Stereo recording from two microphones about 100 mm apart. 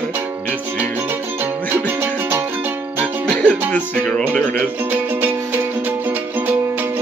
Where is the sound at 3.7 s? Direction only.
10° left (ahead or behind).